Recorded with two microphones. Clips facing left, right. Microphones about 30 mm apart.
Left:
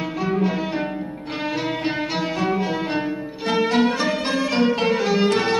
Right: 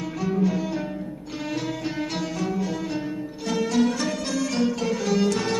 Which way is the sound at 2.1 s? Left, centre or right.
Left.